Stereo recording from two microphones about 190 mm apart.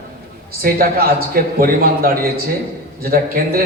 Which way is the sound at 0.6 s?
50° right (ahead or behind).